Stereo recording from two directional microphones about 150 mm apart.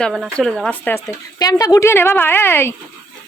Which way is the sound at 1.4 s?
25° left (ahead or behind).